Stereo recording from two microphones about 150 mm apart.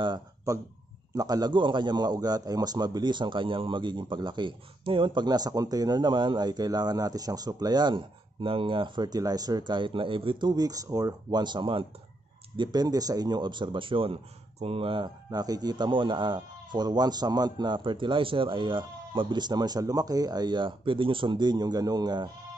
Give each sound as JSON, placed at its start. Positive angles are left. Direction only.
{"t": 0.0, "sound": "a man's voice", "side_deg": -30}